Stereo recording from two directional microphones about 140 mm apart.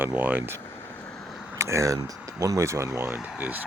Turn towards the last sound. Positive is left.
turn(degrees=-10)  # may be behind; listen again after turning